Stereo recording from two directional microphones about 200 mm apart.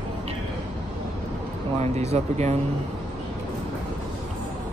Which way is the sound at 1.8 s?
35° right (ahead or behind).